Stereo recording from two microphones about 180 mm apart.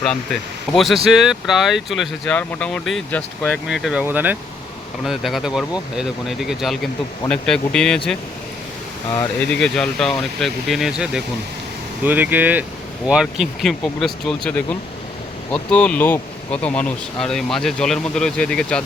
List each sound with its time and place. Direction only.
0.0 s speech: 5° left (ahead or behind)